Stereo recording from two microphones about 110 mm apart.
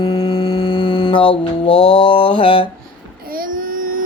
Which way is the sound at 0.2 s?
50° left (ahead or behind).